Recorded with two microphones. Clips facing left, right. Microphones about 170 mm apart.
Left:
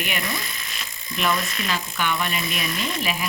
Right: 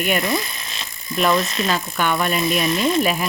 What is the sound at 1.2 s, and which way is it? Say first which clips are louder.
Speech: right 6 dB; 35° right (ahead or behind).